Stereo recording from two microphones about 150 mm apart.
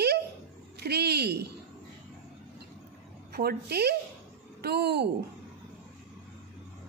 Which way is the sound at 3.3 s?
90° right.